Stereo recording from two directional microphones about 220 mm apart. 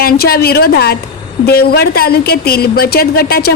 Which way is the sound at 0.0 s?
45° left (ahead or behind).